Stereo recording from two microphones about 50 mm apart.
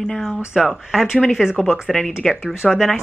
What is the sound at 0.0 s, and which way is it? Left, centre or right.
Speech, centre.